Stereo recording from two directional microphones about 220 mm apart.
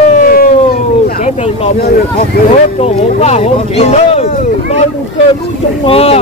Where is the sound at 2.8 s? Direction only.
30° left (ahead or behind).